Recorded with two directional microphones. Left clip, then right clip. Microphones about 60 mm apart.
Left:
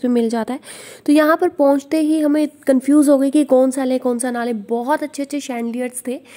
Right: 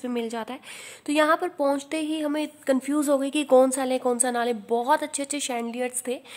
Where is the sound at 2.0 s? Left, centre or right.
Left.